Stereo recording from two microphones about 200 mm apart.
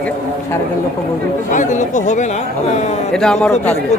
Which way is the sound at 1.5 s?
40° left (ahead or behind).